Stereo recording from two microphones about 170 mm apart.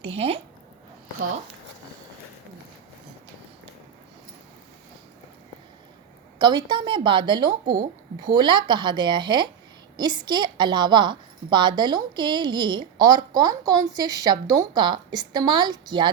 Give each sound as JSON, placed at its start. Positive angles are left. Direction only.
{"t": 0.0, "sound": "a woman's voice", "side_deg": -35}
{"t": 6.4, "sound": "a woman's voice", "side_deg": -25}